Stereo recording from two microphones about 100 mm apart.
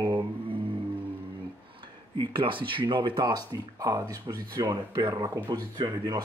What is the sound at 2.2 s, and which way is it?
Speech, 55° right (ahead or behind).